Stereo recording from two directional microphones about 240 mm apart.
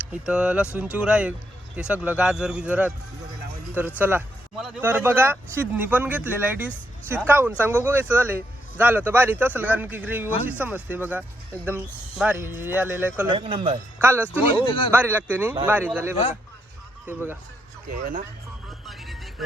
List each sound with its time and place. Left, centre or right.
0.0 s speech: centre
13.3 s a man's voice: centre
14.0 s speech: centre
14.6 s speech: left
14.9 s speech: centre
16.1 s speech: left
17.1 s speech: centre
18.0 s speech: right
18.9 s vehicle: centre